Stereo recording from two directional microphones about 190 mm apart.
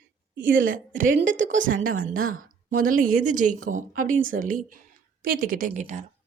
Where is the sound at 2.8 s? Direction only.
45° right (ahead or behind).